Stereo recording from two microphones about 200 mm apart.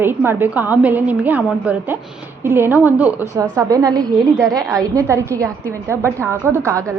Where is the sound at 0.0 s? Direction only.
10° right (ahead or behind).